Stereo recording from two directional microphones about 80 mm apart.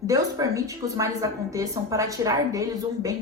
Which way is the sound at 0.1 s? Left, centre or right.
Right.